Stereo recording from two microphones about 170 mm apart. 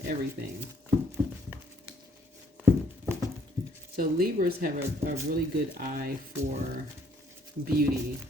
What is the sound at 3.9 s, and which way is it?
Speech, 60° right (ahead or behind).